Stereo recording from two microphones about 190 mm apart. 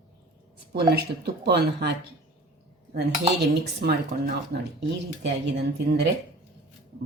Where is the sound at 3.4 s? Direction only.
60° right (ahead or behind).